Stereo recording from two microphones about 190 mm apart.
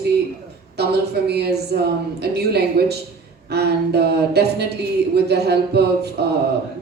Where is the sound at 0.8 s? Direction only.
60° right (ahead or behind).